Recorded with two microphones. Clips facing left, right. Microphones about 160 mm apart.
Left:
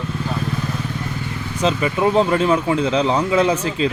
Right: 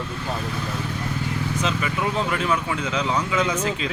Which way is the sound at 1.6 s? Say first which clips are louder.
Left 10 dB; 30° left (ahead or behind).